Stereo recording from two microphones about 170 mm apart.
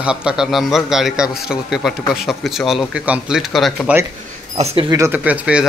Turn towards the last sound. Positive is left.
turn(degrees=-5)  # may be behind; listen again after turning